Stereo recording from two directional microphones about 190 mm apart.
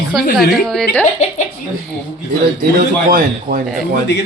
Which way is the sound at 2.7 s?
50° right (ahead or behind).